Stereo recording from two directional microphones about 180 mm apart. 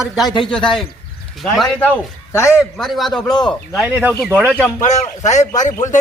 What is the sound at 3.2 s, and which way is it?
Speech, 25° left (ahead or behind).